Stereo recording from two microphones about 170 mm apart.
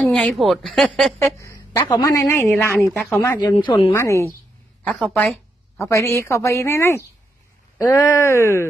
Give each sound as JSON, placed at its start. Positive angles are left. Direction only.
{"t": 0.0, "sound": "speech", "side_deg": 0}
{"t": 1.2, "sound": "a woman's voice", "side_deg": 20}
{"t": 3.3, "sound": "speech", "side_deg": 25}
{"t": 3.9, "sound": "a woman's voice", "side_deg": 15}
{"t": 4.8, "sound": "a woman's voice", "side_deg": 5}